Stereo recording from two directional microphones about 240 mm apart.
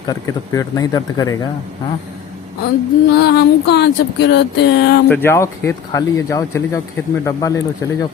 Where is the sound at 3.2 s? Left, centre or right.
Left.